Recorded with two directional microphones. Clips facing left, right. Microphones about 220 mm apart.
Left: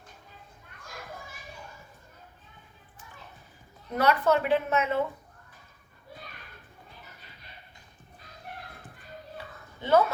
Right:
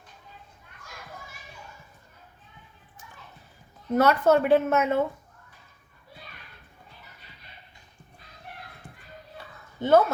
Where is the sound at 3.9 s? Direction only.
45° right (ahead or behind).